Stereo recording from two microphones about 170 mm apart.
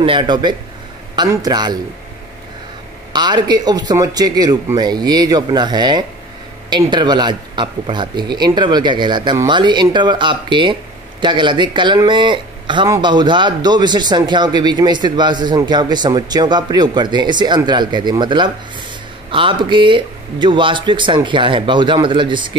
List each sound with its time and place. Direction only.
0.0 s speech: 30° right (ahead or behind)
3.1 s speech: 25° right (ahead or behind)